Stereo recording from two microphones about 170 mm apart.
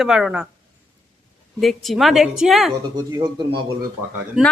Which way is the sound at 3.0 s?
20° right (ahead or behind).